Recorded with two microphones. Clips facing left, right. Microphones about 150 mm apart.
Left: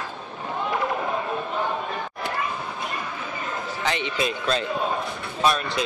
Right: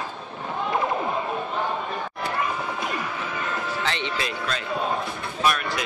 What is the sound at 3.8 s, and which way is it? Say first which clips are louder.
Speech: left 6 dB; 15° left (ahead or behind).